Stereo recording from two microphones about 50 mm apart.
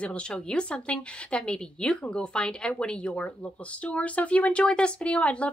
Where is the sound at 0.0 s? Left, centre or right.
Left.